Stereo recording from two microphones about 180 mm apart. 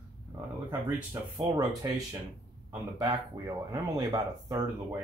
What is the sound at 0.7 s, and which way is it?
Speech, 10° right (ahead or behind).